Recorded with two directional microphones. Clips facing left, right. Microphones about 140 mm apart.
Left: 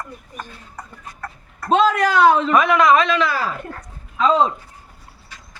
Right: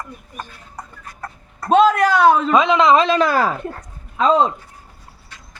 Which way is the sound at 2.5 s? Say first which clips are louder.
Right 1 dB; 20° right (ahead or behind).